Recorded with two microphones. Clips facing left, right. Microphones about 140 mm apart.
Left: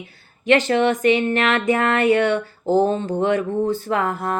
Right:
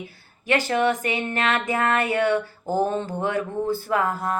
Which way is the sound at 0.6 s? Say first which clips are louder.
Left 5 dB; 20° left (ahead or behind).